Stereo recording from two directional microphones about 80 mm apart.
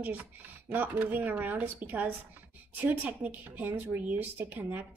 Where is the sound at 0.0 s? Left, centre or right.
Right.